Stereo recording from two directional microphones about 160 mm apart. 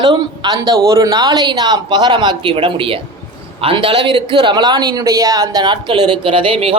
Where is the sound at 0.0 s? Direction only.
25° right (ahead or behind).